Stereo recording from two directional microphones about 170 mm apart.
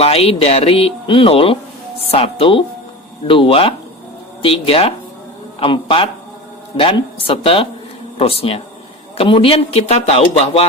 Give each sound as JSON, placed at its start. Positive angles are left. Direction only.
{"t": 0.0, "sound": "speech", "side_deg": 35}